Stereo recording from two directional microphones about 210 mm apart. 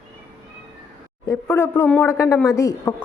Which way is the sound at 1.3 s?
10° left (ahead or behind).